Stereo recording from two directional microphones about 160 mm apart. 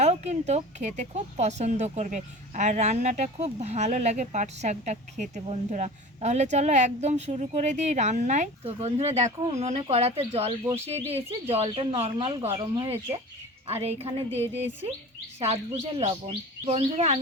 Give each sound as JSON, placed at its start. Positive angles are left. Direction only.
{"t": 0.0, "sound": "speech", "side_deg": -45}
{"t": 12.7, "sound": "speech", "side_deg": -20}
{"t": 13.7, "sound": "speech", "side_deg": -40}